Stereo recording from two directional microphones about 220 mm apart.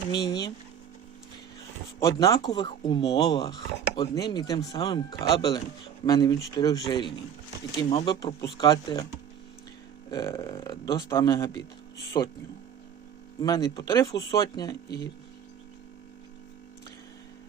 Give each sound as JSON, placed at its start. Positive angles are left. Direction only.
{"t": 0.1, "sound": "speech", "side_deg": 20}
{"t": 2.0, "sound": "speech", "side_deg": 15}
{"t": 10.1, "sound": "speech", "side_deg": 15}
{"t": 13.4, "sound": "speech", "side_deg": 15}